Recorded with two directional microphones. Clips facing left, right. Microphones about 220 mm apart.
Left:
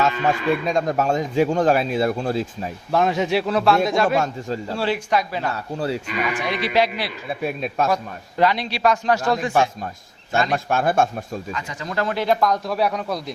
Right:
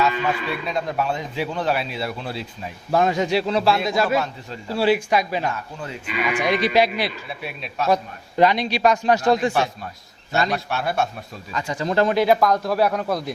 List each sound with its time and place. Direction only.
0.0 s speech: 45° left (ahead or behind)
2.9 s speech: centre (ahead or behind)
4.0 s speech: 45° left (ahead or behind)
4.8 s speech: 10° right (ahead or behind)
5.7 s speech: 35° left (ahead or behind)
6.3 s speech: 15° right (ahead or behind)
7.4 s speech: 45° left (ahead or behind)
8.4 s a man's voice: 20° right (ahead or behind)
10.3 s speech: 50° left (ahead or behind)
11.5 s a man's voice: 30° right (ahead or behind)
12.1 s speech: 10° right (ahead or behind)